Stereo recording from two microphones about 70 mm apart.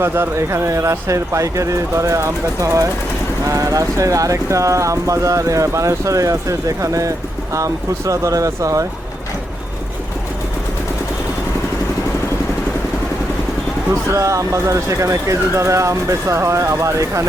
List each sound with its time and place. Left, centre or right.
0.0 s speech: right
14.1 s speech: right